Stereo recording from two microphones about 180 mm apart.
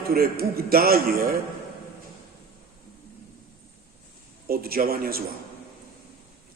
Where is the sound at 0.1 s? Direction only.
55° right (ahead or behind).